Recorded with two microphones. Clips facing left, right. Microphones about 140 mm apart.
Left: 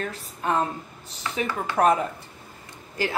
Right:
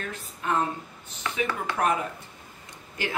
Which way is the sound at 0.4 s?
35° left (ahead or behind).